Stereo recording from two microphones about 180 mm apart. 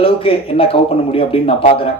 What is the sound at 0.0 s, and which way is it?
A man's voice, 30° left (ahead or behind).